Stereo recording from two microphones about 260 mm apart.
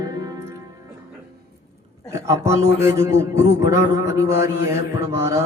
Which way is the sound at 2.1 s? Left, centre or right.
Centre.